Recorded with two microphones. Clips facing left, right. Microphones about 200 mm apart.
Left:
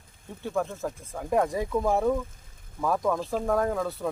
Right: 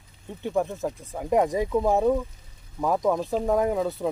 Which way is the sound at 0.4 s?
20° right (ahead or behind).